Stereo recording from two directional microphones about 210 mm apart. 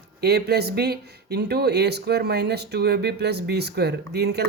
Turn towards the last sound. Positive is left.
turn(degrees=-50)  # may be behind; listen again after turning